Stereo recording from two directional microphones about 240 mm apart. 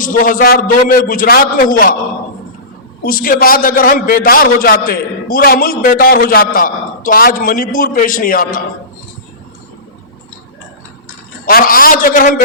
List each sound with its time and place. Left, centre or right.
0.0 s a man's voice: left
3.0 s a man's voice: left
11.4 s a man's voice: left